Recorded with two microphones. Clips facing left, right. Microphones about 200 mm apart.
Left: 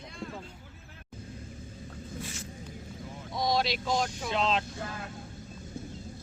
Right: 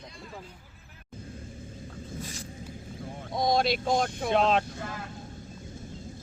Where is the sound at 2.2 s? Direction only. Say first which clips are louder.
Right 1 dB; 35° right (ahead or behind).